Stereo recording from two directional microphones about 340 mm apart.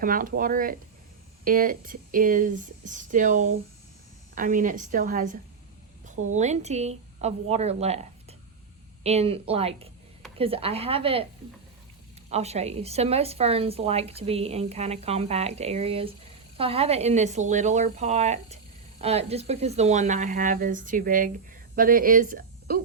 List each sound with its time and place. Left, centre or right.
0.0 s a woman's voice: right
12.3 s a woman's voice: centre